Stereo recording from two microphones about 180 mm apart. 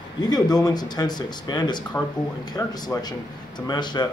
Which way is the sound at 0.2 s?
20° left (ahead or behind).